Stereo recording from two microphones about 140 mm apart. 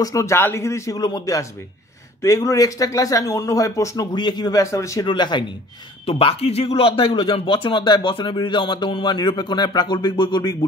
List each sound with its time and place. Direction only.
0.0 s speech: 20° left (ahead or behind)
5.0 s speech: 35° left (ahead or behind)
6.0 s speech: 45° left (ahead or behind)